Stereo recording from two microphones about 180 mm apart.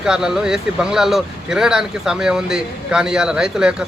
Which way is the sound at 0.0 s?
5° right (ahead or behind).